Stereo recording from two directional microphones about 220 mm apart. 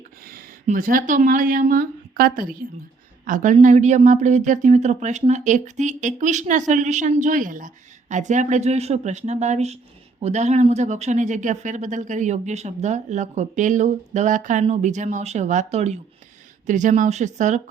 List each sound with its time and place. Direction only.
0.3 s speech: 40° right (ahead or behind)